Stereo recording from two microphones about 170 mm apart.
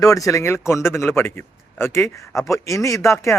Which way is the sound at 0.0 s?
20° left (ahead or behind).